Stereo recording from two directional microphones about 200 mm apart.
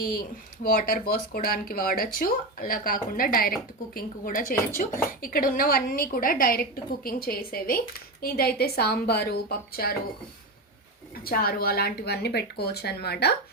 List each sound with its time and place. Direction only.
0.6 s speech: 45° left (ahead or behind)
11.1 s speech: 50° left (ahead or behind)